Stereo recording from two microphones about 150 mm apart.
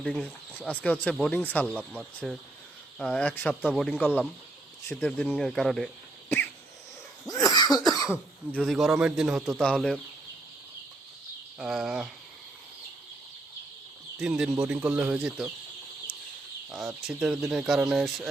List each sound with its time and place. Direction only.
0.0 s speech: 5° left (ahead or behind)
1.7 s speech: centre (ahead or behind)
3.5 s speech: 5° right (ahead or behind)
6.2 s cough: 10° left (ahead or behind)
7.3 s cough: 25° left (ahead or behind)
7.7 s speech: centre (ahead or behind)
11.5 s speech: 5° right (ahead or behind)
14.2 s speech: 5° right (ahead or behind)
16.8 s speech: 5° right (ahead or behind)